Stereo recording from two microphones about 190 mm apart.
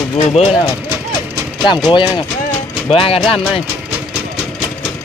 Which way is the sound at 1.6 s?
25° left (ahead or behind).